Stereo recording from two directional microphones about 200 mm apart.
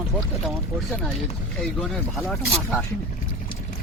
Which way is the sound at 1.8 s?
5° left (ahead or behind).